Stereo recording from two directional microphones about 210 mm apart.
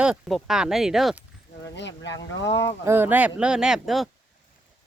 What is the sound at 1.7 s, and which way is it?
Speech, 55° left (ahead or behind).